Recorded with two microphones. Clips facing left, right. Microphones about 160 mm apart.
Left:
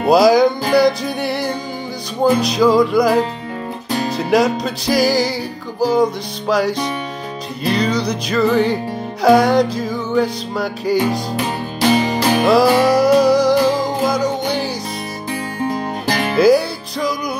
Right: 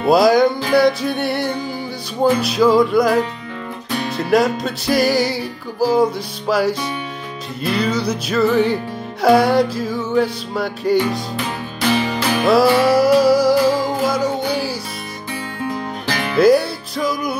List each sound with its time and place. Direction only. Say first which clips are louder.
0.0 s music: left 1 dB; centre (ahead or behind)
4.2 s music: even; centre (ahead or behind)
11.0 s music: left 2 dB; 35° left (ahead or behind)
12.4 s music: even; centre (ahead or behind)
15.6 s music: left 4 dB; 35° left (ahead or behind)
16.3 s music: even; centre (ahead or behind)